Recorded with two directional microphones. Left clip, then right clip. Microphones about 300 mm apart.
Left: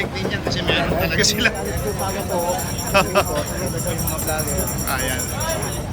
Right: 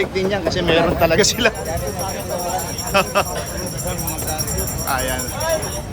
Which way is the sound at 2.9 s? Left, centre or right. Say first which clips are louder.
Even; centre.